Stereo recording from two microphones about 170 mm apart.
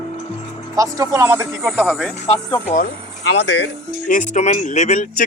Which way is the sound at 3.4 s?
90° left.